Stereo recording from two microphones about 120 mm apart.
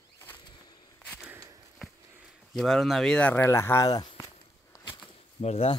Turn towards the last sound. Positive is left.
turn(degrees=55)  # may be behind; listen again after turning